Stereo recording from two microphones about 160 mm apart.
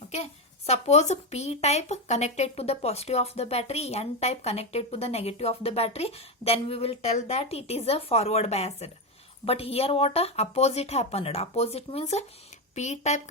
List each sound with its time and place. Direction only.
0.7 s speech: 45° left (ahead or behind)